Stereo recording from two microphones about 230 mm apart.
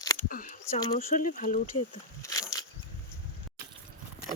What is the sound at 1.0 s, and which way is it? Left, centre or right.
Speech, left.